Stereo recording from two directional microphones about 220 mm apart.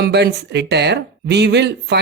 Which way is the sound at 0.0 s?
50° right (ahead or behind).